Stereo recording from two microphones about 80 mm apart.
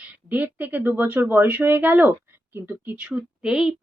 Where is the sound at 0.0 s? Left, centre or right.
Centre.